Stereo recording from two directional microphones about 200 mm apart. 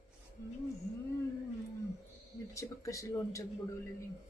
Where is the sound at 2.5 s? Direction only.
15° left (ahead or behind).